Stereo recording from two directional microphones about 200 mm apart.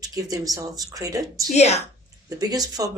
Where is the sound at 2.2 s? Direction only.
20° right (ahead or behind).